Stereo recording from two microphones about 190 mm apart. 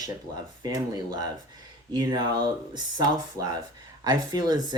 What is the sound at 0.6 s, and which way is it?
Speech, 20° right (ahead or behind).